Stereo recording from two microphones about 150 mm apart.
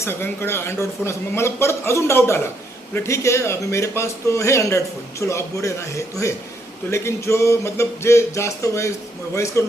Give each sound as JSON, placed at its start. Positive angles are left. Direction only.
{"t": 0.0, "sound": "a man's voice", "side_deg": 15}
{"t": 6.9, "sound": "speech", "side_deg": 20}